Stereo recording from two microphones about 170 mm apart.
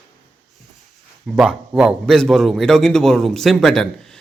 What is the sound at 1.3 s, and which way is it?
A man's voice, 5° right (ahead or behind).